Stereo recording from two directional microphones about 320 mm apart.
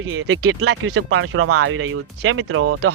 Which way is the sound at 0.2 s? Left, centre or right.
Right.